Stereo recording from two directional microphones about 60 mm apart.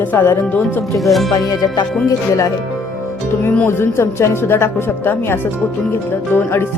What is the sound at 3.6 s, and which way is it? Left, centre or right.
A man's voice, left.